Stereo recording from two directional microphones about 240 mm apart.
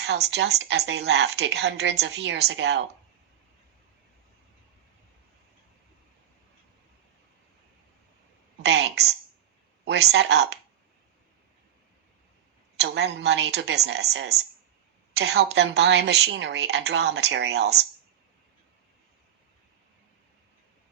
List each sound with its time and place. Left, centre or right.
0.0 s a woman's voice: right
8.6 s a woman's voice: right
12.7 s a woman's voice: right